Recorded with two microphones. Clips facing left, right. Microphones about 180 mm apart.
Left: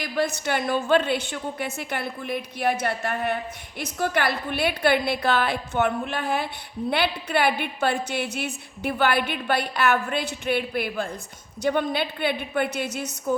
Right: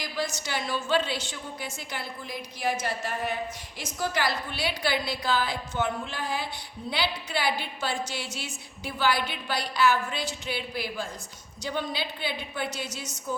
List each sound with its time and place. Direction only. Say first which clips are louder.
0.0 s a woman's voice: left 7 dB; 60° left (ahead or behind)